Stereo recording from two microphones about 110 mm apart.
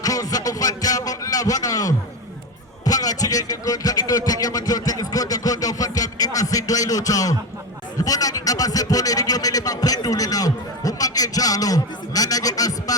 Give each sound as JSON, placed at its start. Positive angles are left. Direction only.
{"t": 0.0, "sound": "a man's voice", "side_deg": 35}